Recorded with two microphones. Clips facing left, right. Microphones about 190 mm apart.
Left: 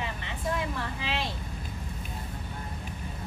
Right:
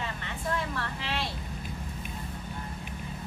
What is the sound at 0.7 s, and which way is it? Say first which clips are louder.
Vehicle: left 1 dB; 15° left (ahead or behind).